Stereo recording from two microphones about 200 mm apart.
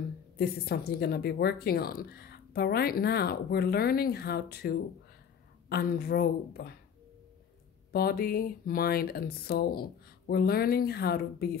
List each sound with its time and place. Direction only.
0.4 s speech: 50° left (ahead or behind)
7.9 s speech: 50° left (ahead or behind)